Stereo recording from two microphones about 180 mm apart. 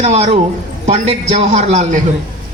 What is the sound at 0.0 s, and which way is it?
A man's voice, 35° right (ahead or behind).